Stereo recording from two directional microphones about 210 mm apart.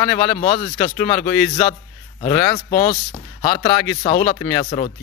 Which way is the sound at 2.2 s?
25° left (ahead or behind).